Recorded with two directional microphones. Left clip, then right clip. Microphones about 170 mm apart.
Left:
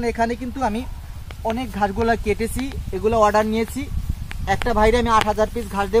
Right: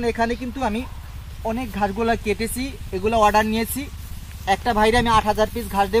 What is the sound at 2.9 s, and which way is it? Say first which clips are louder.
Speech: even; 45° right (ahead or behind).